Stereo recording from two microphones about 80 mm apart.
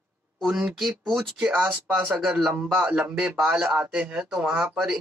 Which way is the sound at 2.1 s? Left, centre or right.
Centre.